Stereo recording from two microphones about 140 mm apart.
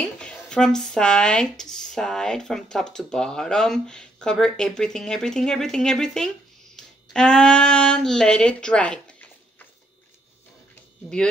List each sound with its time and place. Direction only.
0.2 s speech: 5° left (ahead or behind)